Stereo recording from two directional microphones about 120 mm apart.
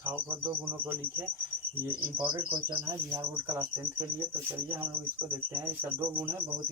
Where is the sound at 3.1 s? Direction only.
25° right (ahead or behind).